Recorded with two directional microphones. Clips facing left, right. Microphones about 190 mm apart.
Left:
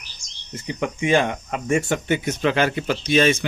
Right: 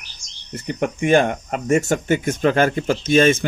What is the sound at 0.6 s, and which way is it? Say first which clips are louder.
Speech: right 3 dB; 55° right (ahead or behind).